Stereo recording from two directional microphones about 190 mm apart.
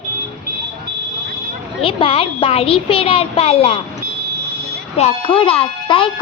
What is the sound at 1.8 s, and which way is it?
Speech, 30° left (ahead or behind).